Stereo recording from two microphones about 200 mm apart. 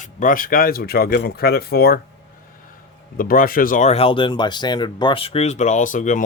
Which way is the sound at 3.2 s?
45° left (ahead or behind).